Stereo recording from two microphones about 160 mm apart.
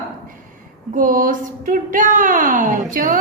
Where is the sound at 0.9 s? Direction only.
55° right (ahead or behind).